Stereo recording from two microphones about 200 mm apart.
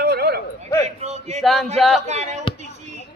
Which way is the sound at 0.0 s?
55° right (ahead or behind).